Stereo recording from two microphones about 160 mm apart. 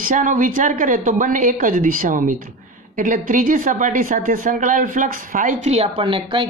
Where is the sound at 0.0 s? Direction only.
55° right (ahead or behind).